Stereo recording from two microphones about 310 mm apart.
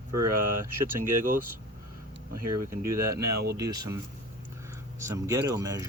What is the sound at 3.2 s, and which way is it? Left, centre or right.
Speech, right.